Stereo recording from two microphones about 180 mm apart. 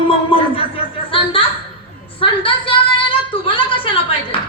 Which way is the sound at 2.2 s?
30° left (ahead or behind).